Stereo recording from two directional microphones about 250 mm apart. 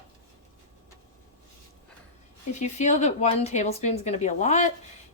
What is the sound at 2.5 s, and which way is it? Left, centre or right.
Speech, left.